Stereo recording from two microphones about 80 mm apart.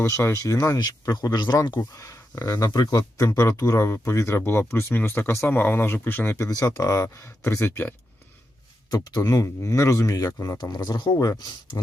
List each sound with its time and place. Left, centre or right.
0.0 s speech: left
1.0 s speech: left
2.0 s speech: left
2.6 s speech: left
6.6 s speech: left
7.4 s speech: left
8.9 s speech: left
10.6 s speech: left